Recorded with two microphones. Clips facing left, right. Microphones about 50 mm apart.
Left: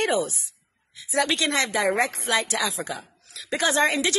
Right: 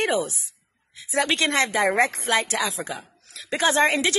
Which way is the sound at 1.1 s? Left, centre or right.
Right.